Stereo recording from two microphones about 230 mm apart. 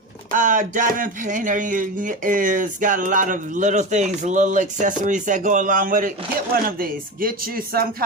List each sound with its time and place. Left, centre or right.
0.3 s speech: right